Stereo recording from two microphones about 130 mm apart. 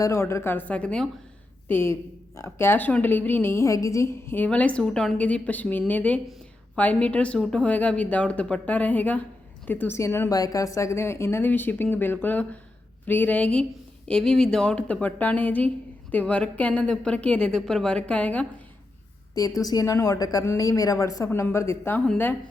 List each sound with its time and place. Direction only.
0.0 s a woman's voice: 20° left (ahead or behind)
1.6 s a woman's voice: 15° left (ahead or behind)
19.3 s a woman's voice: 25° left (ahead or behind)